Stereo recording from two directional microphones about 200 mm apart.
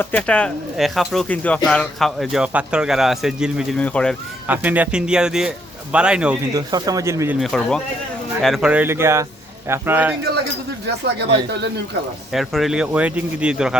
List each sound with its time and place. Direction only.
0.0 s speech: 5° left (ahead or behind)
4.4 s speech: 10° right (ahead or behind)
6.5 s speech: 20° right (ahead or behind)
7.3 s speech: centre (ahead or behind)
12.3 s speech: centre (ahead or behind)